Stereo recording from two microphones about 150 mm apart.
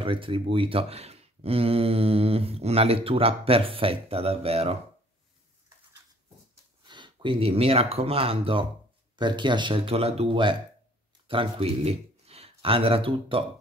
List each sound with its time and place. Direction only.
0.0 s speech: 35° right (ahead or behind)
6.8 s speech: 30° right (ahead or behind)